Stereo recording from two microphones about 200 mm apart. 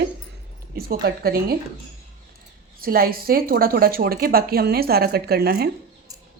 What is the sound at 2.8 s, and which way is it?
A woman's voice, 50° right (ahead or behind).